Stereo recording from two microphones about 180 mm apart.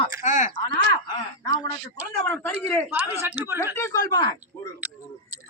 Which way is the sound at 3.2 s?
10° right (ahead or behind).